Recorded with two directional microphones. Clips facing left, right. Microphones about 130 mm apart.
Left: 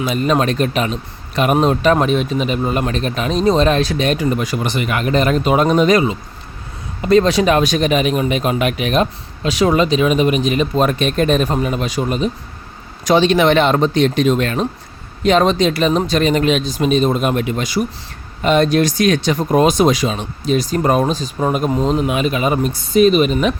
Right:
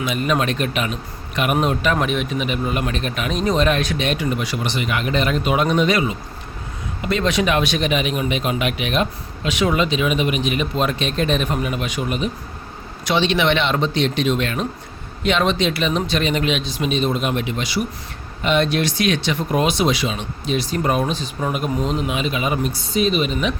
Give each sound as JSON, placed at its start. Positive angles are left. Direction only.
{"t": 0.0, "sound": "speech", "side_deg": 35}